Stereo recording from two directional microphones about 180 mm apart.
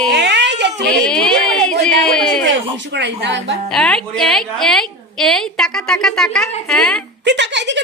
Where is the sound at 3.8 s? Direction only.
5° left (ahead or behind).